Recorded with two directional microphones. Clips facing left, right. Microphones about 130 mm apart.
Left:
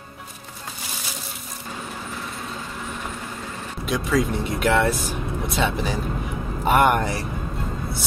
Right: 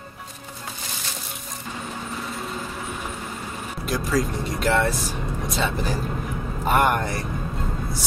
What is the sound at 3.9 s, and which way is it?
Speech, centre (ahead or behind).